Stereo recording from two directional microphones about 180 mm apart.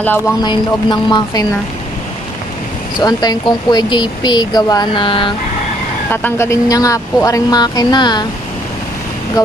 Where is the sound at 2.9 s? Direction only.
25° left (ahead or behind).